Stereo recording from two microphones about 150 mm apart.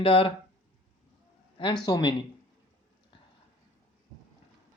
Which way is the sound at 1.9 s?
30° left (ahead or behind).